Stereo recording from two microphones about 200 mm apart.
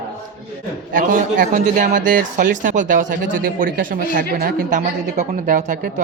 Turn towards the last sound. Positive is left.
turn(degrees=-40)  # may be behind; listen again after turning